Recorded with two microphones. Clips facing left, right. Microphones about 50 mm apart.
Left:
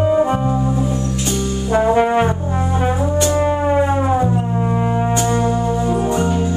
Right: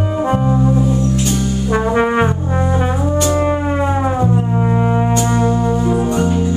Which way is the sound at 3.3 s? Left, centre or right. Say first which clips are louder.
Even; centre.